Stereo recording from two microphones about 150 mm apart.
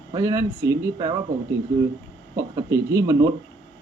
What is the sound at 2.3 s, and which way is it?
Speech, 20° right (ahead or behind).